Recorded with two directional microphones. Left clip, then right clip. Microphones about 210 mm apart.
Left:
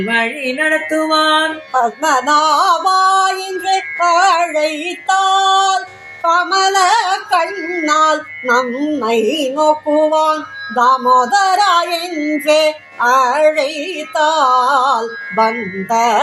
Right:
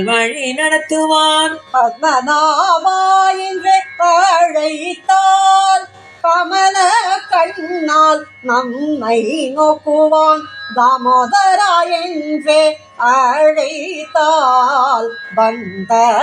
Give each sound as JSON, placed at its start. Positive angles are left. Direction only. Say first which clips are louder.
{"t": 0.1, "sound": "music", "louder": "right 1 dB", "side_deg": -20}
{"t": 1.7, "sound": "music", "louder": "right 2 dB", "side_deg": 20}